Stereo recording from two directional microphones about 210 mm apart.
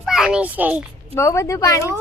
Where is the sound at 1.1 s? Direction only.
15° left (ahead or behind).